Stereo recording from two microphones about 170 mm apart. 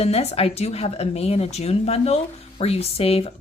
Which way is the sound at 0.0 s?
40° left (ahead or behind).